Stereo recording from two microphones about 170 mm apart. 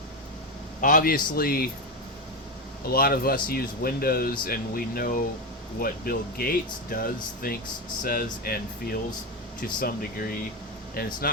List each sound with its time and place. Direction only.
0.8 s speech: 55° left (ahead or behind)
2.8 s speech: 60° left (ahead or behind)